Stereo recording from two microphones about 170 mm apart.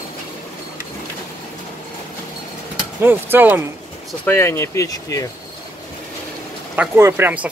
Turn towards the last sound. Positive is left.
turn(degrees=-10)  # may be behind; listen again after turning